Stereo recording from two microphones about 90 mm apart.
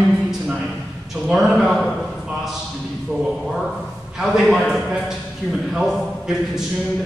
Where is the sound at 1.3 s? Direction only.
Centre (ahead or behind).